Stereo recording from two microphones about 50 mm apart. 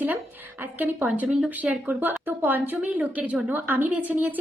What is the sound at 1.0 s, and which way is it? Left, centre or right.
A woman's voice, right.